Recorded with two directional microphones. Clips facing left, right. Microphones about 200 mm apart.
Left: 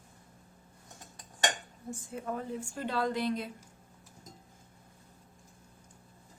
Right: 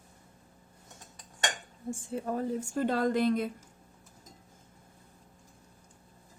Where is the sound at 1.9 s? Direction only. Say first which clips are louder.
Right 4 dB; 30° right (ahead or behind); by 3.5 s 50° right (ahead or behind).